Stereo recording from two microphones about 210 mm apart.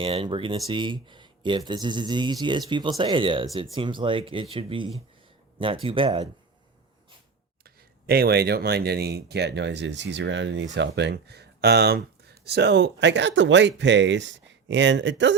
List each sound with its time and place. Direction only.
0.0 s speech: 25° right (ahead or behind)
7.6 s speech: 45° right (ahead or behind)